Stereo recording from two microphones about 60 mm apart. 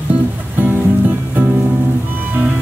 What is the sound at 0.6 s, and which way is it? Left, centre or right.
Music, right.